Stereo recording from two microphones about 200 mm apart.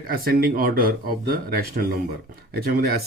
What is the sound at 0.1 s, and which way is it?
Speech, 50° right (ahead or behind).